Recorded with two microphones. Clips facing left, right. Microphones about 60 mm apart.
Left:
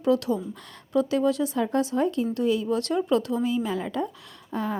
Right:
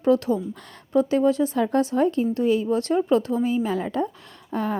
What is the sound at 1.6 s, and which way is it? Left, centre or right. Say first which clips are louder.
Speech: right 3 dB; right.